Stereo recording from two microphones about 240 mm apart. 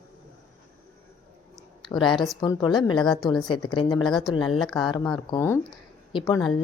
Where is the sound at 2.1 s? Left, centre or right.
Centre.